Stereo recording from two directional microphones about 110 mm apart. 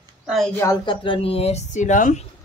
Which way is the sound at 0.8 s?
50° left (ahead or behind).